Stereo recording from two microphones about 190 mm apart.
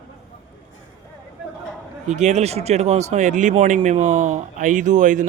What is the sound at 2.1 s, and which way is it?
A man's voice, 40° right (ahead or behind).